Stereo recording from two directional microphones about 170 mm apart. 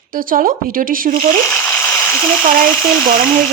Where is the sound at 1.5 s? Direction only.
15° left (ahead or behind).